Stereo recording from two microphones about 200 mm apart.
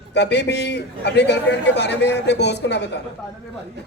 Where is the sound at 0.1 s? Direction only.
60° left (ahead or behind).